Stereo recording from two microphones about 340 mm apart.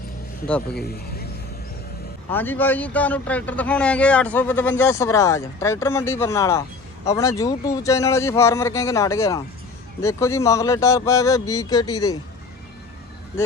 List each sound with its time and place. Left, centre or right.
0.4 s speech: centre
2.3 s speech: centre